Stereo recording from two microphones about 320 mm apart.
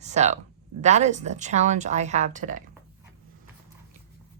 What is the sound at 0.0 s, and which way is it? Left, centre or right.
Speech, right.